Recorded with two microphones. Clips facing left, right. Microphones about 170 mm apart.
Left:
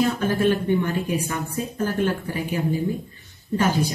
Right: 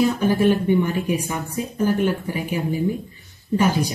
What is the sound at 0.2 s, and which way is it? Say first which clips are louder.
Speech: right 3 dB; 15° right (ahead or behind).